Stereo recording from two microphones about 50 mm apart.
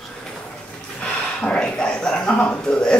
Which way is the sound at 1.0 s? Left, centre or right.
Left.